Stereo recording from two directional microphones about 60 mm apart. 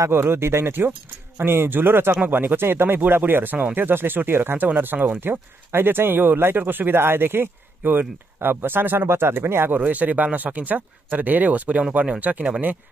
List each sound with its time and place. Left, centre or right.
0.1 s speech: right
9.8 s speech: right